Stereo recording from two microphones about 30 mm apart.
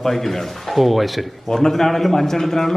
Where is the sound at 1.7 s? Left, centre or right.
Centre.